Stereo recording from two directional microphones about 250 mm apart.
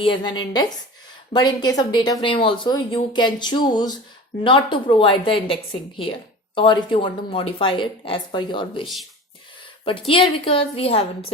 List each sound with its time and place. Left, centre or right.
0.0 s speech: centre
10.1 s speech: left